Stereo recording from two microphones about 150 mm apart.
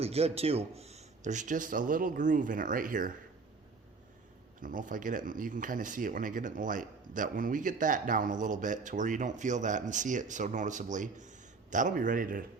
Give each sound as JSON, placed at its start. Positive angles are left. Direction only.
{"t": 0.0, "sound": "speech", "side_deg": -45}
{"t": 4.6, "sound": "speech", "side_deg": -65}